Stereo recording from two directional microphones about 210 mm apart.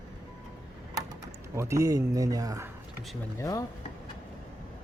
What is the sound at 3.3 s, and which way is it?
Speech, 15° left (ahead or behind).